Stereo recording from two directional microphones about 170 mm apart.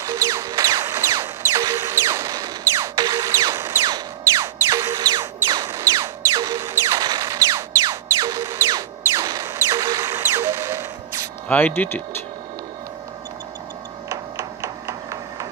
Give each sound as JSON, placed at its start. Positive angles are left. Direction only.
{"t": 0.0, "sound": "music", "side_deg": -20}
{"t": 11.4, "sound": "speech", "side_deg": 10}
{"t": 14.0, "sound": "a sound", "side_deg": -20}